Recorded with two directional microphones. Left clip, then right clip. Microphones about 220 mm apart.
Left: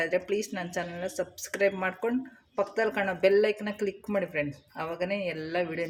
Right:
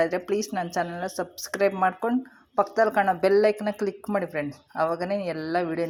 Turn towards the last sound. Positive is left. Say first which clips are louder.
# right 4 dB
turn(degrees=-20)  # may be behind; listen again after turning